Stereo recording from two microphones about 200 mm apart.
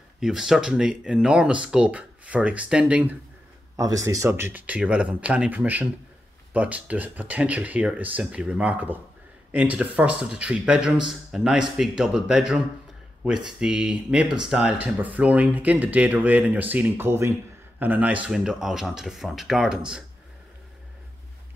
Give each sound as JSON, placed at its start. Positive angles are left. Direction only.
{"t": 0.2, "sound": "speech", "side_deg": 0}